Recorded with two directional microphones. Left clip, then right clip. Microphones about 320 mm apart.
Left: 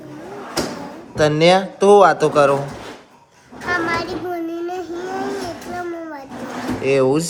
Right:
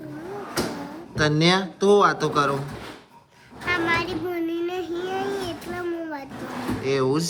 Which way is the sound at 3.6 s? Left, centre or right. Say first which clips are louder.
Left 3 dB; centre.